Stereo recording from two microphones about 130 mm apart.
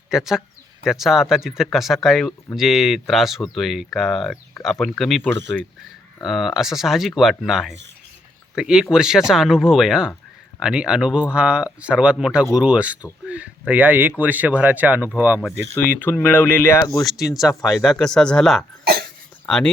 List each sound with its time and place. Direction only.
0.1 s speech: 5° right (ahead or behind)
16.2 s speech: 15° left (ahead or behind)
16.9 s speech: centre (ahead or behind)
17.6 s speech: 25° left (ahead or behind)
17.8 s speech: 5° left (ahead or behind)